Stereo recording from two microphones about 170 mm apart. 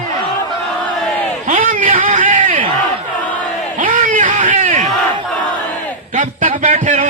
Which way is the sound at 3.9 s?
50° right (ahead or behind).